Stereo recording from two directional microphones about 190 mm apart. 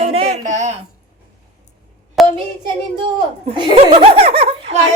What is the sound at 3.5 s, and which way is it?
Speech, 30° right (ahead or behind).